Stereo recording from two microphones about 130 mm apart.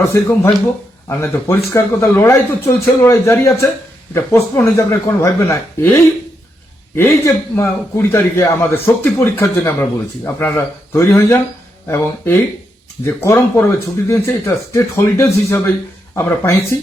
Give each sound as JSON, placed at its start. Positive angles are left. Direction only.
{"t": 0.0, "sound": "a man's voice", "side_deg": 20}